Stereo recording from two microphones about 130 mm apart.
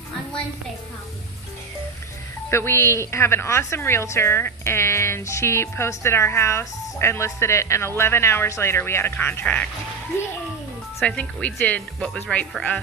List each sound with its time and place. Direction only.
2.5 s a woman's voice: 20° left (ahead or behind)
11.0 s speech: 10° left (ahead or behind)